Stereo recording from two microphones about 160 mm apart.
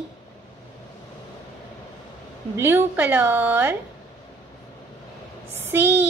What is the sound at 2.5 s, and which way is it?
Speech, 15° right (ahead or behind).